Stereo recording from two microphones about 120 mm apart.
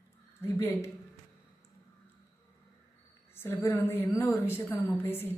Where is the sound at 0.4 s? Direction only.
20° left (ahead or behind).